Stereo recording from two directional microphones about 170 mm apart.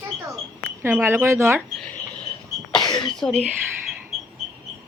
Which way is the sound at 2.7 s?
25° left (ahead or behind).